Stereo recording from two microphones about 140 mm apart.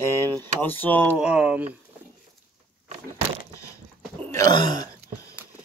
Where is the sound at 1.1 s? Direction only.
10° right (ahead or behind).